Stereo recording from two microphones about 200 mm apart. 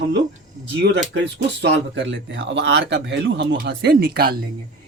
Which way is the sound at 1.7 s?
65° right (ahead or behind).